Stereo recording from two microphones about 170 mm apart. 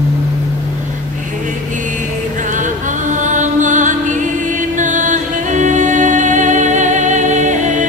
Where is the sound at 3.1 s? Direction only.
45° right (ahead or behind).